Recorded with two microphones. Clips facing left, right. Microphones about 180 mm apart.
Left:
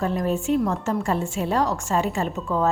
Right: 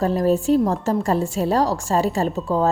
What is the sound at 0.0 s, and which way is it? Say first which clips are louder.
A woman's voice: right 5 dB; 35° right (ahead or behind).